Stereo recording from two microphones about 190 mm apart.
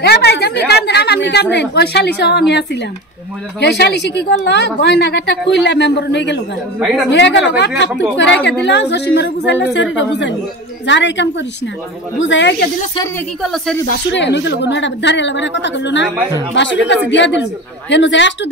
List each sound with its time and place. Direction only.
0.0 s a woman's voice: 60° left (ahead or behind)
6.8 s speech: centre (ahead or behind)
7.1 s a woman's voice: 70° left (ahead or behind)
13.4 s speech: centre (ahead or behind)
14.1 s a woman's voice: 65° left (ahead or behind)